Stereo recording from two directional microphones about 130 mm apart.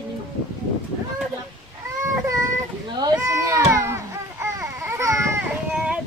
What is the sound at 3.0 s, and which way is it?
Baby cry, 25° right (ahead or behind).